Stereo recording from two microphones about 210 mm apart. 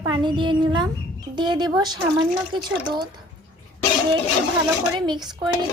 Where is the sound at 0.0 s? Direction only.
20° right (ahead or behind).